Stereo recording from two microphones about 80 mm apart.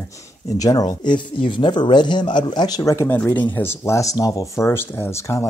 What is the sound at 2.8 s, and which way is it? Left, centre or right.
Speech, left.